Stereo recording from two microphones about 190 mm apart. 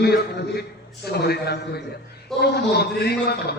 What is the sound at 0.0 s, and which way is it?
A man's voice, 60° left (ahead or behind).